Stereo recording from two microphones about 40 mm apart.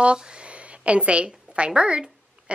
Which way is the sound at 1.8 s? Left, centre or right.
Right.